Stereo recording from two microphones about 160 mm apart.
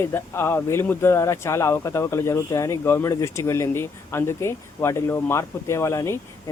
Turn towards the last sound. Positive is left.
turn(degrees=20)  # may be behind; listen again after turning